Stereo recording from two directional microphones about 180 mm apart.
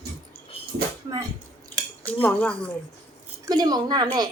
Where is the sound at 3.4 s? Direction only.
20° right (ahead or behind).